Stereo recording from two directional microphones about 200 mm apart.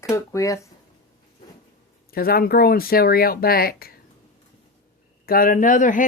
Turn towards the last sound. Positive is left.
turn(degrees=40)  # may be behind; listen again after turning